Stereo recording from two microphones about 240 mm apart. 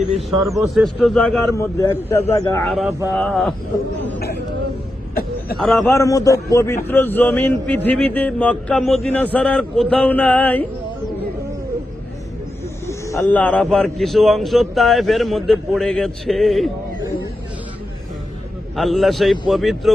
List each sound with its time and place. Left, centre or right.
0.1 s a man's voice: centre
2.6 s speech: centre
4.0 s speech: left
5.6 s speech: centre
5.9 s a man's voice: centre
12.9 s snake: centre
13.3 s speech: centre
18.8 s speech: centre